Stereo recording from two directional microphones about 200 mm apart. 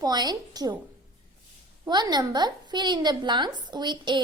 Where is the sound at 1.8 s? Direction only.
20° right (ahead or behind).